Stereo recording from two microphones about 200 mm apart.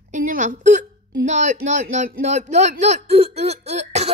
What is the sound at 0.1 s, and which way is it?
A woman's voice, 40° right (ahead or behind).